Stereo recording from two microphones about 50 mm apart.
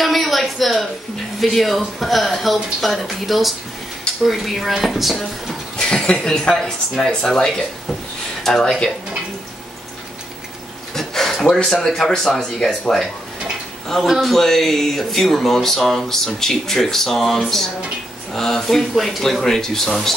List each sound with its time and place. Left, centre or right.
0.0 s a sound: centre
1.4 s speech: centre
5.8 s speech: centre
8.5 s speech: centre
11.0 s a sound: centre
11.4 s speech: centre
14.0 s speech: centre
14.3 s speech: centre